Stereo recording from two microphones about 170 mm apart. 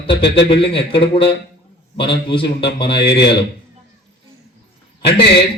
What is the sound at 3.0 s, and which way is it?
Speech, 80° left.